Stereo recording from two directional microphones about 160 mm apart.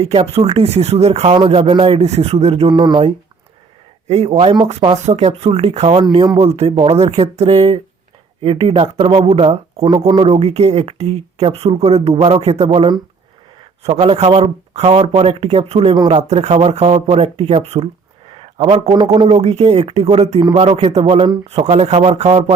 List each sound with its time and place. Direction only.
0.0 s speech: 40° right (ahead or behind)
2.7 s speech: 30° right (ahead or behind)
4.1 s speech: 40° right (ahead or behind)
6.0 s speech: 25° right (ahead or behind)
10.1 s speech: 30° right (ahead or behind)
10.3 s speech: 40° right (ahead or behind)
18.3 s a sound: 35° right (ahead or behind)
19.3 s speech: 40° right (ahead or behind)
20.4 s speech: 25° right (ahead or behind)
20.7 s speech: 40° right (ahead or behind)